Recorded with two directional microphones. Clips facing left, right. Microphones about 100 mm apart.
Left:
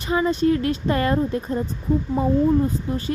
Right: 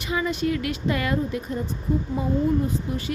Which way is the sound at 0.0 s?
40° left (ahead or behind).